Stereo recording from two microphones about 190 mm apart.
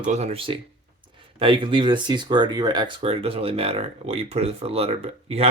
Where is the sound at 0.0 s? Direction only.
35° right (ahead or behind).